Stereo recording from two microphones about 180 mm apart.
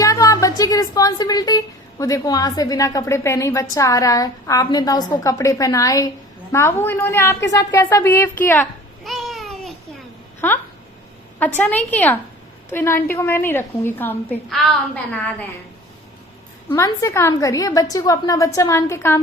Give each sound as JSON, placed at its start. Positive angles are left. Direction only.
{"t": 0.0, "sound": "a woman's voice", "side_deg": 20}
{"t": 9.0, "sound": "babbling", "side_deg": 0}
{"t": 10.4, "sound": "a woman's voice", "side_deg": 10}
{"t": 16.6, "sound": "a woman's voice", "side_deg": 15}